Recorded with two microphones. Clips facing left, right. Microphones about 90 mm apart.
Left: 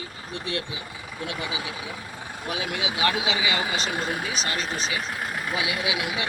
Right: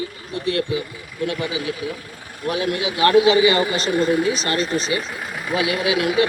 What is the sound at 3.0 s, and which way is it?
Speech, 50° right (ahead or behind).